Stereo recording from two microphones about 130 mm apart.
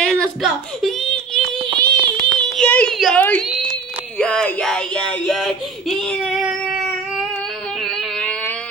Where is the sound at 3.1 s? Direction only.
10° left (ahead or behind).